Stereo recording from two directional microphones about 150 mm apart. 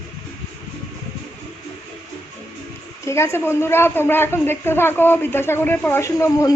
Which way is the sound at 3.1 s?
20° left (ahead or behind).